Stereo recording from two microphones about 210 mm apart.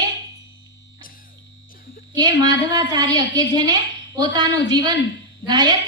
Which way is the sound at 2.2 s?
20° right (ahead or behind).